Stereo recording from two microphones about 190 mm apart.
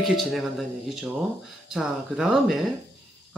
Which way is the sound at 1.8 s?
Centre (ahead or behind).